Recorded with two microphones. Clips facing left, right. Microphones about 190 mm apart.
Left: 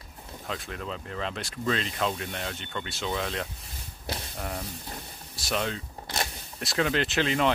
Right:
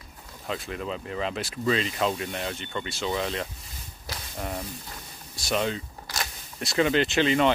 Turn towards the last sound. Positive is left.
turn(degrees=0)  # may be behind; listen again after turning